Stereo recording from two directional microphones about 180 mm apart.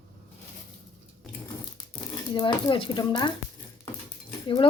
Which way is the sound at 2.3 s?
25° left (ahead or behind).